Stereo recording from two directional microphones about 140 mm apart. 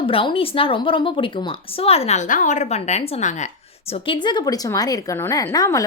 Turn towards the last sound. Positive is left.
turn(degrees=25)  # may be behind; listen again after turning